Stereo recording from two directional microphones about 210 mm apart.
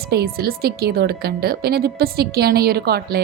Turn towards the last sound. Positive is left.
turn(degrees=-50)  # may be behind; listen again after turning